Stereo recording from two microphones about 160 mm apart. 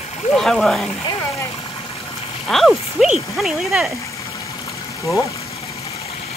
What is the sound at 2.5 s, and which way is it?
Speech, centre (ahead or behind).